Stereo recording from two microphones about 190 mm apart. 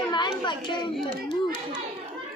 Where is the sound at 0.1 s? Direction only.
25° left (ahead or behind).